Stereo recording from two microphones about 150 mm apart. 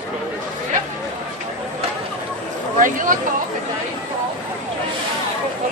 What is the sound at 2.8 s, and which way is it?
Speech, 60° right (ahead or behind).